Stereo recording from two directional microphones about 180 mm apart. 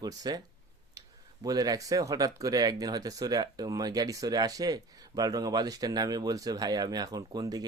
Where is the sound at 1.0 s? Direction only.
20° right (ahead or behind).